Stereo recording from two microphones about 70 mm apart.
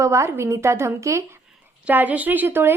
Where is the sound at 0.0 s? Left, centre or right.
Right.